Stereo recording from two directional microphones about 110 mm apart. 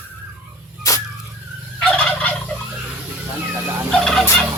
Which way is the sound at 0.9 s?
30° left (ahead or behind).